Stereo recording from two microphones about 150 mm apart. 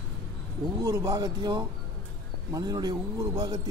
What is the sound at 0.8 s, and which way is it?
Speech, 25° right (ahead or behind).